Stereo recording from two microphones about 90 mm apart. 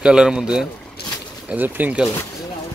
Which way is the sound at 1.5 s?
20° right (ahead or behind).